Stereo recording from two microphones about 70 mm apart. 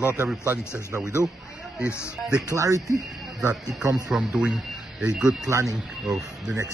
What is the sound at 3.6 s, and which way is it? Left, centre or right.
Speech, right.